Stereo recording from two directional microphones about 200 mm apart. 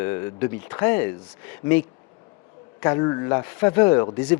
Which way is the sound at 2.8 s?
15° left (ahead or behind).